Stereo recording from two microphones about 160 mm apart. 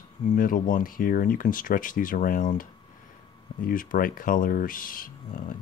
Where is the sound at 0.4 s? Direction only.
60° left (ahead or behind).